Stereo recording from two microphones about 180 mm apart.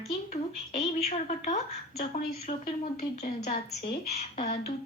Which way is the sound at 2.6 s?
55° left (ahead or behind).